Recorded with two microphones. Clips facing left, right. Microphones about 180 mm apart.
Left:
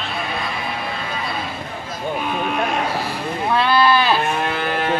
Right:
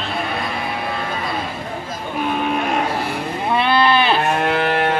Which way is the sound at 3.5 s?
20° right (ahead or behind).